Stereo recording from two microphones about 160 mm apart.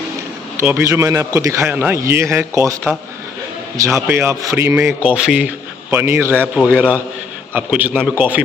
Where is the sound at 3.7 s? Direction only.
20° right (ahead or behind).